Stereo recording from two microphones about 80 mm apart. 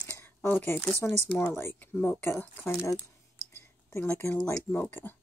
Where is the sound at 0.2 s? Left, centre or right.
Left.